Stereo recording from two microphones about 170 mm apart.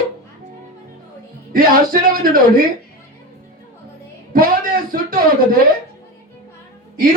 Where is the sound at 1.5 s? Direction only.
55° right (ahead or behind).